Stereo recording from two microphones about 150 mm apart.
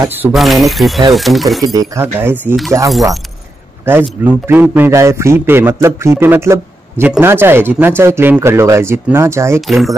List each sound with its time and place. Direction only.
0.0 s a man's voice: 15° right (ahead or behind)
0.3 s speech: centre (ahead or behind)
1.6 s a man's voice: 25° right (ahead or behind)
3.8 s a man's voice: 15° right (ahead or behind)
9.6 s speech: centre (ahead or behind)